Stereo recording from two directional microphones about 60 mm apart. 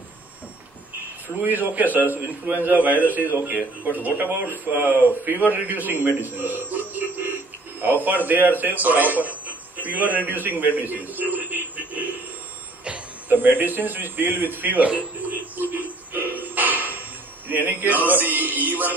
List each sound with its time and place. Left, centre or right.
1.4 s a man's voice: right
10.8 s radio: right
12.8 s speech: right
15.5 s a sound: right
17.5 s music: right
18.0 s a man's voice: right